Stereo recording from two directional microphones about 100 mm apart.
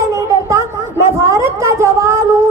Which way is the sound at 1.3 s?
30° right (ahead or behind).